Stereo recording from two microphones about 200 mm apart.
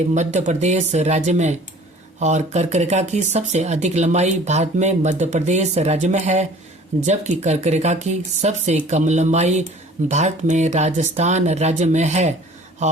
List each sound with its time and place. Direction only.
0.1 s speech: 35° right (ahead or behind)